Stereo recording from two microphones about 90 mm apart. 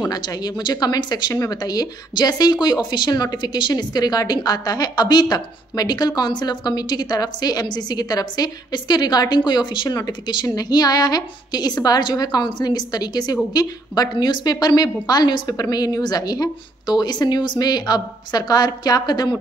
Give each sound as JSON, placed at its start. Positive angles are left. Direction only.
{"t": 0.1, "sound": "a woman's voice", "side_deg": 45}